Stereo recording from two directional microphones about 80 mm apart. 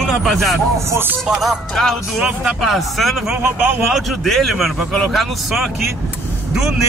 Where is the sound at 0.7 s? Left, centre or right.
Right.